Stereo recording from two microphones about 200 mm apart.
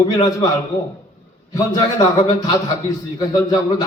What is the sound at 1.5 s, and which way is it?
A man's voice, 20° left (ahead or behind).